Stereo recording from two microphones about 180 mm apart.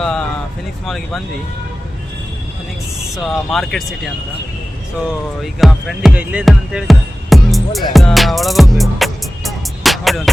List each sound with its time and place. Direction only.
0.0 s a sound: 5° left (ahead or behind)
0.9 s speech: centre (ahead or behind)
3.2 s speech: centre (ahead or behind)
5.4 s music: centre (ahead or behind)